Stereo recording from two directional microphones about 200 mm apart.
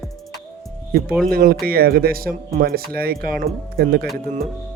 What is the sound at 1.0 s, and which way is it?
Speech, centre (ahead or behind).